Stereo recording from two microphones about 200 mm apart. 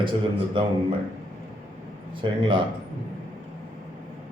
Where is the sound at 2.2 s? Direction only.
25° right (ahead or behind).